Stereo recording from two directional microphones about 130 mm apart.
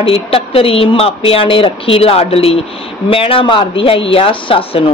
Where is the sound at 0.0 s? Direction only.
45° left (ahead or behind).